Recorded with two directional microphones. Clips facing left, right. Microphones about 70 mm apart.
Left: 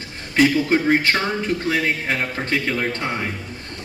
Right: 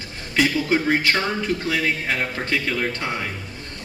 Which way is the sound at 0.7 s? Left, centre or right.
Left.